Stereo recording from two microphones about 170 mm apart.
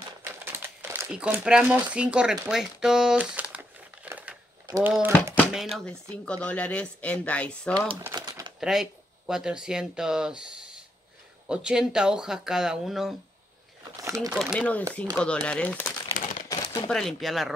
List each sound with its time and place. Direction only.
0.2 s crumpling: 15° right (ahead or behind)
1.1 s speech: 5° right (ahead or behind)
2.4 s crumpling: 5° right (ahead or behind)
4.6 s speech: 20° right (ahead or behind)
5.5 s speech: centre (ahead or behind)
8.1 s typewriter: 25° right (ahead or behind)
8.5 s speech: 5° right (ahead or behind)
11.4 s speech: 5° right (ahead or behind)
14.0 s speech: 15° right (ahead or behind)
14.5 s speech: 10° left (ahead or behind)
16.4 s a sound: 20° left (ahead or behind)
16.9 s speech: centre (ahead or behind)